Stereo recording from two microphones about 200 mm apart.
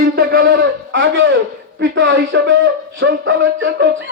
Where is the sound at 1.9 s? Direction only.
60° right (ahead or behind).